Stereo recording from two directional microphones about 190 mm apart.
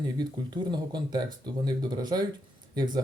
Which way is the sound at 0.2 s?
20° right (ahead or behind).